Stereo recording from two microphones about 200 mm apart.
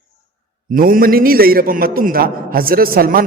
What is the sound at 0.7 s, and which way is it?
A man's voice, 45° right (ahead or behind).